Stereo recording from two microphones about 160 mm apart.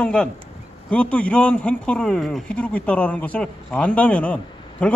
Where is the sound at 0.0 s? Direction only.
5° left (ahead or behind).